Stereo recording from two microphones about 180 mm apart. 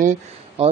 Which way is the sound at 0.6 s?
35° right (ahead or behind).